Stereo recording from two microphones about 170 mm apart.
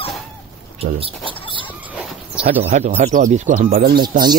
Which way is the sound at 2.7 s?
45° right (ahead or behind).